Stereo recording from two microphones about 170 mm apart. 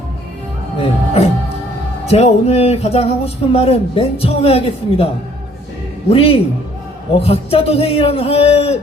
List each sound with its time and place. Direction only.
0.8 s music: 35° left (ahead or behind)
2.0 s speech: 40° left (ahead or behind)
6.1 s speech: 35° left (ahead or behind)